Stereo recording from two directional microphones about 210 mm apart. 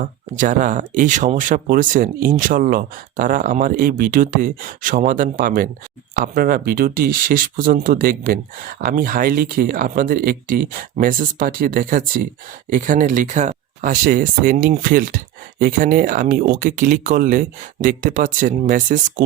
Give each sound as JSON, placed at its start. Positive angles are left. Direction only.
{"t": 0.0, "sound": "speech", "side_deg": -40}